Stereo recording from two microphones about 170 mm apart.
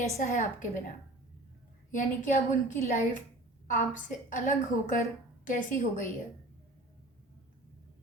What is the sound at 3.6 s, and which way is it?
A woman's voice, 50° left (ahead or behind).